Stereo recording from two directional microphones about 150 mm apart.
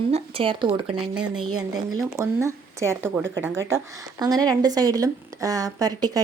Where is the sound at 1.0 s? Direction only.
5° right (ahead or behind).